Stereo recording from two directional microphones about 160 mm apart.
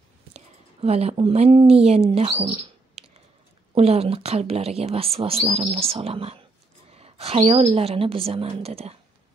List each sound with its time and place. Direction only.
0.3 s speech: 40° right (ahead or behind)